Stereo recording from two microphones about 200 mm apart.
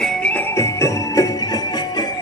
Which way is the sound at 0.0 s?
5° left (ahead or behind).